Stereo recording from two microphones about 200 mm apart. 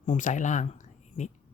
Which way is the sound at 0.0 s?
40° left (ahead or behind).